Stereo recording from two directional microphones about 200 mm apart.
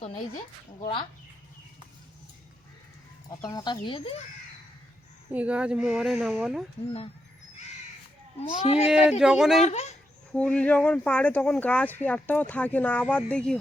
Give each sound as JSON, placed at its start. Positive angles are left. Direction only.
{"t": 0.8, "sound": "speech", "side_deg": 25}
{"t": 3.5, "sound": "speech", "side_deg": 20}
{"t": 5.3, "sound": "speech", "side_deg": -5}
{"t": 8.4, "sound": "speech", "side_deg": 30}
{"t": 8.9, "sound": "speech", "side_deg": -5}
{"t": 9.6, "sound": "speech", "side_deg": 35}
{"t": 10.3, "sound": "speech", "side_deg": 5}